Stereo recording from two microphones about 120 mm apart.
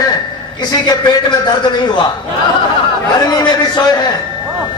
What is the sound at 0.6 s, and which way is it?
Speech, 35° left (ahead or behind).